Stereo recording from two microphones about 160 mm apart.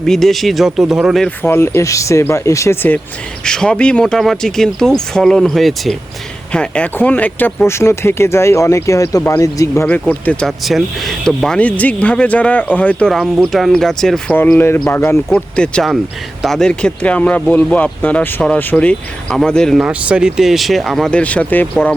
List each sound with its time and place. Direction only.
0.0 s speech: centre (ahead or behind)
1.4 s speech: 15° left (ahead or behind)